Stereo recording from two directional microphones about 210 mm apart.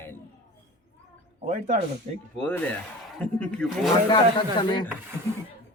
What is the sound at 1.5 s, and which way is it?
Speech, 35° right (ahead or behind).